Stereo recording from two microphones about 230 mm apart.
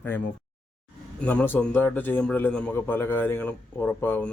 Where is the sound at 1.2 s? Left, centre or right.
Centre.